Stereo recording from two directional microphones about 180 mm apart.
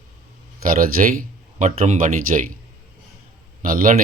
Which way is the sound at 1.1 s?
40° right (ahead or behind).